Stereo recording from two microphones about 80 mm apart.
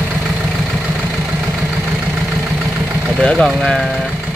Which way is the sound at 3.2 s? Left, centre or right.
Centre.